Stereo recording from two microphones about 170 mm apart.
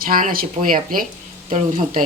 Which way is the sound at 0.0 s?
55° right (ahead or behind).